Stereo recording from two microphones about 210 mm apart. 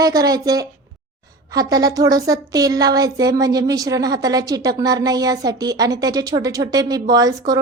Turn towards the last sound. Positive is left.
turn(degrees=-15)  # may be behind; listen again after turning